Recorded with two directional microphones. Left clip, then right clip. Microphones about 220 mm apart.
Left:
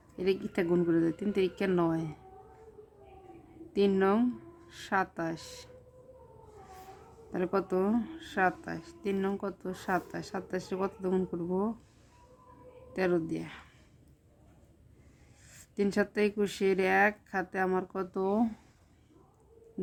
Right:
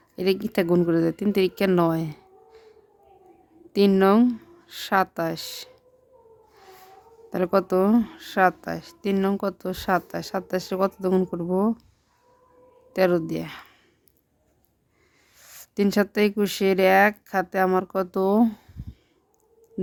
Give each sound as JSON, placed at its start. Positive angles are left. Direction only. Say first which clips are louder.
{"t": 0.2, "sound": "speech", "louder": "right 7 dB", "side_deg": -50}
{"t": 3.7, "sound": "speech", "louder": "right 8 dB", "side_deg": -50}
{"t": 7.3, "sound": "speech", "louder": "right 9 dB", "side_deg": -50}
{"t": 12.9, "sound": "speech", "louder": "right 9 dB", "side_deg": -50}
{"t": 15.4, "sound": "speech", "louder": "right 7 dB", "side_deg": -50}